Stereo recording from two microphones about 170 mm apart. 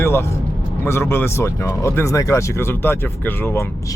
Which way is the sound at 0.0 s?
15° left (ahead or behind).